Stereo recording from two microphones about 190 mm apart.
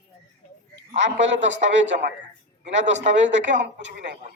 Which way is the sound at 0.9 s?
75° right (ahead or behind).